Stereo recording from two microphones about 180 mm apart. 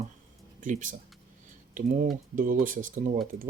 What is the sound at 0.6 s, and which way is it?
Speech, 45° right (ahead or behind).